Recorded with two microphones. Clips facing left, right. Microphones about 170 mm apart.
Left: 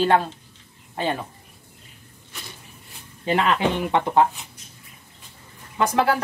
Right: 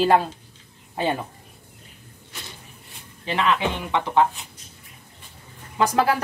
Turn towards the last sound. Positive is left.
turn(degrees=0)  # may be behind; listen again after turning